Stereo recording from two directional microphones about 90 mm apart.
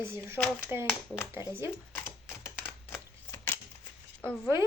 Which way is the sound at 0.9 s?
25° left (ahead or behind).